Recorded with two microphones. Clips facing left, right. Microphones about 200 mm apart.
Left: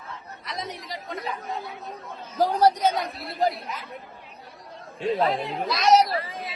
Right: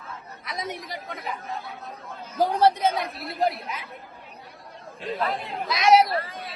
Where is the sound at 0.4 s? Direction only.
Centre (ahead or behind).